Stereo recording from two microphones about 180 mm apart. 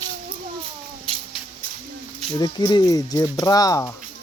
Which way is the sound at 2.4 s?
25° left (ahead or behind).